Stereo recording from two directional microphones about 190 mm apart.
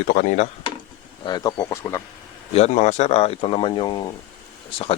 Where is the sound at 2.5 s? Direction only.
35° left (ahead or behind).